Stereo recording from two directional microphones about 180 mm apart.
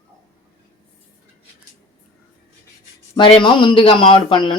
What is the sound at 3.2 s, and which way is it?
A man's voice, 30° left (ahead or behind).